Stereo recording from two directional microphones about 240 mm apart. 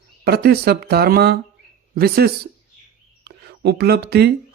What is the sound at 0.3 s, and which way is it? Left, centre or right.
A man's voice, right.